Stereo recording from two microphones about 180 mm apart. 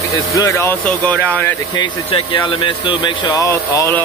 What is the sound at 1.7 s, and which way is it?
Speech, 25° left (ahead or behind).